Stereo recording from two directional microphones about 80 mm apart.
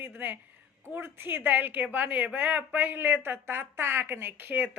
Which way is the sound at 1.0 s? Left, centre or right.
Right.